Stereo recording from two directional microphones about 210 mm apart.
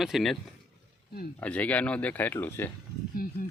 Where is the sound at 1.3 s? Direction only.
5° left (ahead or behind).